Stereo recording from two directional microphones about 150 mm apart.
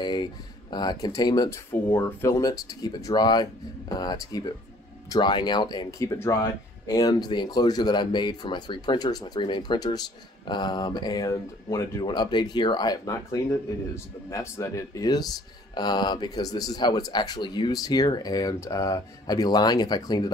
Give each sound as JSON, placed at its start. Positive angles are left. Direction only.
{"t": 0.0, "sound": "speech", "side_deg": 30}